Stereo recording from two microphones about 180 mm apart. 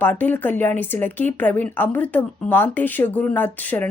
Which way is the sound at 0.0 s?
10° left (ahead or behind).